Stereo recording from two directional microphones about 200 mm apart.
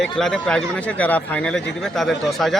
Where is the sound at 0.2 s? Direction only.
5° left (ahead or behind).